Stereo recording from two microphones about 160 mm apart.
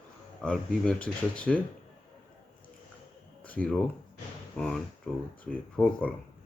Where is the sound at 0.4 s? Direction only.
5° left (ahead or behind).